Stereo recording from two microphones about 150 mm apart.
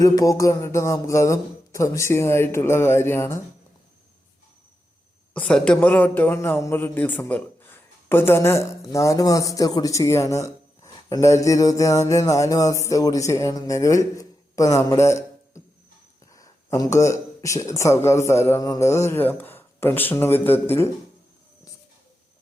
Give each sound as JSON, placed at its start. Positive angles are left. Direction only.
{"t": 0.0, "sound": "music", "side_deg": 20}
{"t": 5.3, "sound": "a man's voice", "side_deg": 5}
{"t": 11.1, "sound": "music", "side_deg": 20}
{"t": 16.3, "sound": "speech", "side_deg": 20}